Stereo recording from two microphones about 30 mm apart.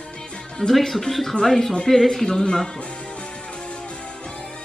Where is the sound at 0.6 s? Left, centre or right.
Centre.